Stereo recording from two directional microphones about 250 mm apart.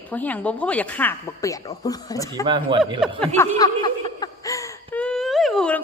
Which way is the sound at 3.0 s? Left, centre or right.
Centre.